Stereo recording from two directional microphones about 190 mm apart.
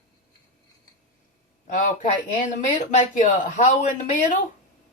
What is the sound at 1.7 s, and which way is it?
Speech, 40° left (ahead or behind).